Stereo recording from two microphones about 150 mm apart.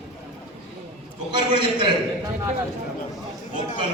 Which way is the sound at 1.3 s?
30° right (ahead or behind).